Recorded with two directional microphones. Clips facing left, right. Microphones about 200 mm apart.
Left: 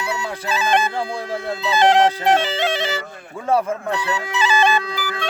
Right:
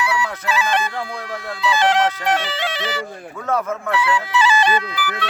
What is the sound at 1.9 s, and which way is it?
Speech, 25° left (ahead or behind).